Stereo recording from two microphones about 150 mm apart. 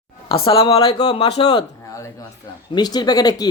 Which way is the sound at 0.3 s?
40° left (ahead or behind).